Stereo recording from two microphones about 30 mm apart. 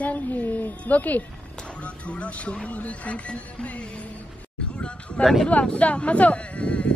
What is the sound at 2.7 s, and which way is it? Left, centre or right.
Speech, left.